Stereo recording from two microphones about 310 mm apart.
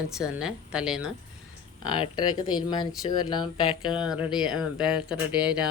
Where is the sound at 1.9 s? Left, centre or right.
Centre.